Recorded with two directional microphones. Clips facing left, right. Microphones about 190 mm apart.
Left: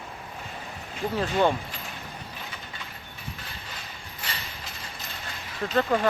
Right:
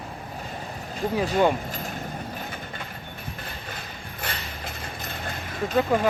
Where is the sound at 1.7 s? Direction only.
45° right (ahead or behind).